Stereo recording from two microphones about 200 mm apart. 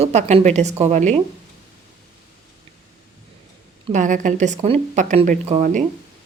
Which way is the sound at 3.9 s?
40° right (ahead or behind).